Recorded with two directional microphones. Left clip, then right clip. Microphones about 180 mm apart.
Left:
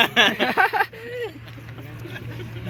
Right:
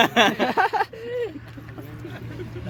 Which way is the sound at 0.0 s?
75° right (ahead or behind).